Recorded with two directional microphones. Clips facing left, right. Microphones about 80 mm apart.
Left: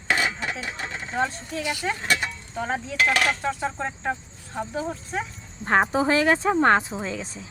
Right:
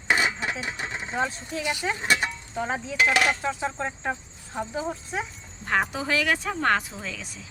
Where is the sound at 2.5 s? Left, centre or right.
Centre.